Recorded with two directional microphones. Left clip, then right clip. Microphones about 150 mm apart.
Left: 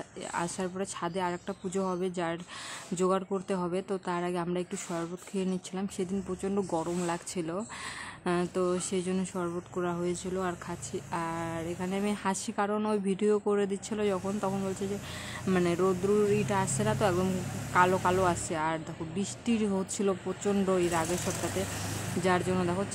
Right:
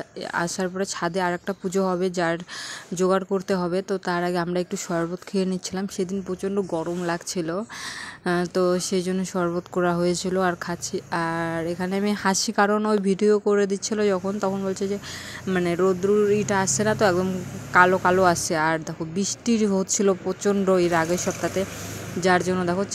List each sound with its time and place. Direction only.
0.3 s speech: 30° right (ahead or behind)
6.4 s a woman's voice: 20° right (ahead or behind)
15.6 s a woman's voice: 25° right (ahead or behind)
22.2 s speech: 25° right (ahead or behind)